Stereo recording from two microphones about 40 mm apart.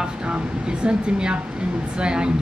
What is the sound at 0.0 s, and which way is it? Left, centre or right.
Air conditioning, right.